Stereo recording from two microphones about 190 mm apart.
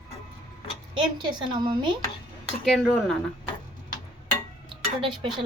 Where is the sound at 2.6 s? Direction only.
Centre (ahead or behind).